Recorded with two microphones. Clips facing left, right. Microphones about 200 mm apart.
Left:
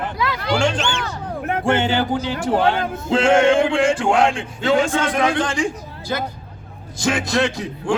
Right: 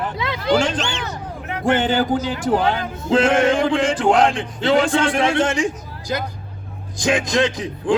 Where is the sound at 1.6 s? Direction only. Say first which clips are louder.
Right 2 dB; 35° right (ahead or behind).